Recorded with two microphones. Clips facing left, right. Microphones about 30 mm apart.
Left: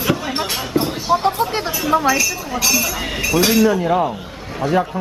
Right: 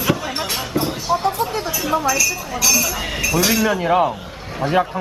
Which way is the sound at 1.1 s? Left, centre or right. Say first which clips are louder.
Left 3 dB; centre.